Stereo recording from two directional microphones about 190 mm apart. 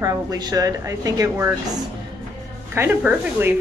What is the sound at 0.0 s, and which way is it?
Speech, 20° right (ahead or behind).